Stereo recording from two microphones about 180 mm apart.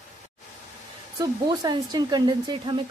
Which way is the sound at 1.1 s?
20° right (ahead or behind).